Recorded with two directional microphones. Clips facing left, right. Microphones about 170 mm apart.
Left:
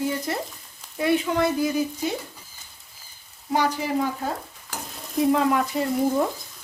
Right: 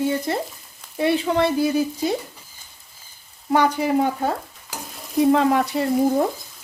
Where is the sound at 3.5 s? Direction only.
60° right (ahead or behind).